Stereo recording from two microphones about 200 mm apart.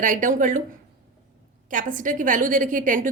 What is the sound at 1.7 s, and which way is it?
A woman's voice, 40° right (ahead or behind).